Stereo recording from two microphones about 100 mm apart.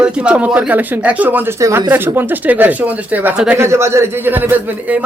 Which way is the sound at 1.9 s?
20° right (ahead or behind).